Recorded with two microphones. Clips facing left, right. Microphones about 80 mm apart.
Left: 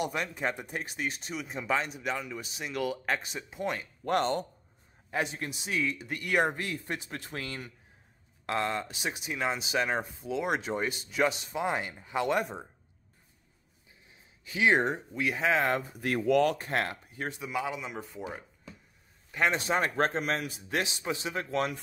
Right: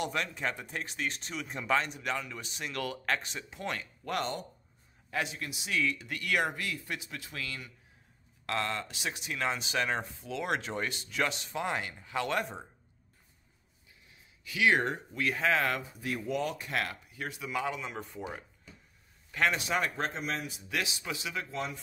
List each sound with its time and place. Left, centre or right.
0.0 s speech: centre
4.0 s speech: left
8.5 s speech: left
10.0 s speech: left
14.4 s speech: left
15.8 s speech: left
16.5 s speech: left
17.5 s speech: centre
19.5 s speech: left
20.7 s speech: left
21.5 s speech: left